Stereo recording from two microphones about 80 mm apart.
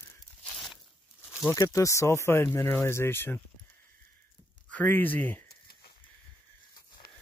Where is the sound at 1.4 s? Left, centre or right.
Left.